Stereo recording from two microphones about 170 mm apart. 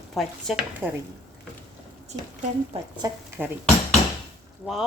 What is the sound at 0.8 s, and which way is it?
Speech, 10° right (ahead or behind).